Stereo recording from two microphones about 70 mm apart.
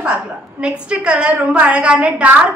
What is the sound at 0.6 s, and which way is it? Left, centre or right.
A woman's voice, centre.